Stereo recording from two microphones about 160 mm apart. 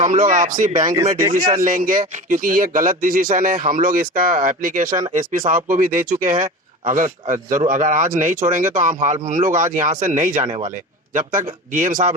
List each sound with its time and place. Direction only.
0.0 s a man's voice: 55° right (ahead or behind)